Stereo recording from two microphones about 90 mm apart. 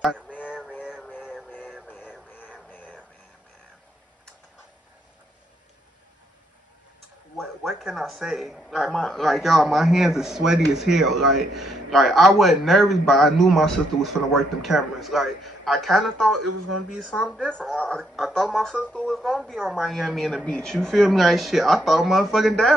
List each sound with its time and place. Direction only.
2.3 s music: 20° left (ahead or behind)
7.3 s a man's voice: centre (ahead or behind)